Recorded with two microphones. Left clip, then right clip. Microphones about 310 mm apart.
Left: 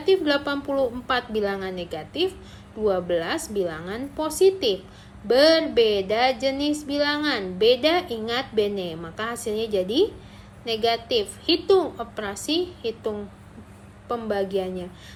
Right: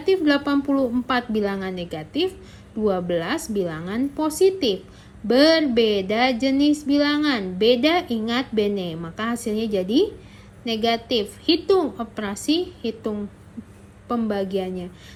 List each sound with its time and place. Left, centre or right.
0.0 s female singing: centre
9.8 s a woman's voice: right
10.8 s female singing: centre